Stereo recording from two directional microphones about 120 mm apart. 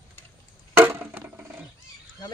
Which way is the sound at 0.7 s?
15° right (ahead or behind).